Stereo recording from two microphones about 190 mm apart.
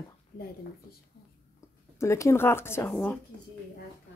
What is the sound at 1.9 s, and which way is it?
A woman's voice, 15° left (ahead or behind).